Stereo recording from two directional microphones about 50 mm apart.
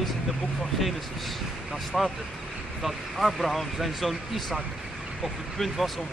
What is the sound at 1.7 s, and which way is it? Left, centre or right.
Speech, centre.